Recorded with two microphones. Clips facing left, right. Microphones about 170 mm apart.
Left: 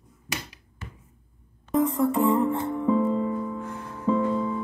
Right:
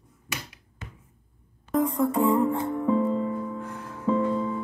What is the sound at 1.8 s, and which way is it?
Music, 25° left (ahead or behind).